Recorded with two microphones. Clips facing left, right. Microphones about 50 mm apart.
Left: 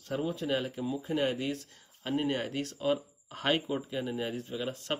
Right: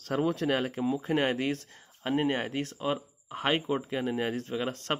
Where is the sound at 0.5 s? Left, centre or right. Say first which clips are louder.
Right 4 dB; right.